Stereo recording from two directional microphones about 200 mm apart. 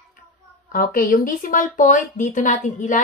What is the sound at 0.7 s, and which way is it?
A woman's voice, 45° left (ahead or behind).